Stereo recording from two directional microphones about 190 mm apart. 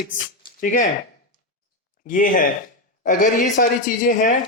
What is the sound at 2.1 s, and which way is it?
Speech, 45° left (ahead or behind).